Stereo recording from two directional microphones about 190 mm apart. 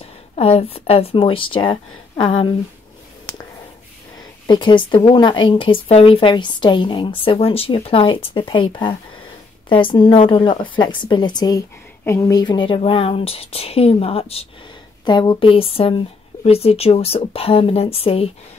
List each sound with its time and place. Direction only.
0.0 s speech: 30° left (ahead or behind)
4.5 s speech: 25° left (ahead or behind)